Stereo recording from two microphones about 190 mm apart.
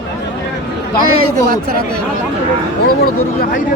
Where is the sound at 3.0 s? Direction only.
50° left (ahead or behind).